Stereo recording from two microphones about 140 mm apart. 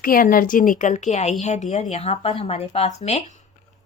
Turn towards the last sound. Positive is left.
turn(degrees=50)  # may be behind; listen again after turning